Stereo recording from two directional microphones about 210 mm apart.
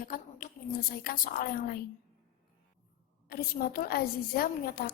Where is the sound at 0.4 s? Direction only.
35° left (ahead or behind).